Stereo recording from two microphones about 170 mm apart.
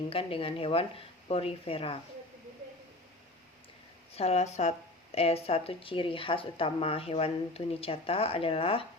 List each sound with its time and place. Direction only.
0.1 s speech: 35° left (ahead or behind)
4.1 s speech: 40° left (ahead or behind)